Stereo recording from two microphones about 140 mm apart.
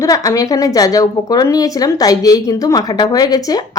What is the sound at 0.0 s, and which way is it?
A woman's voice, 25° left (ahead or behind).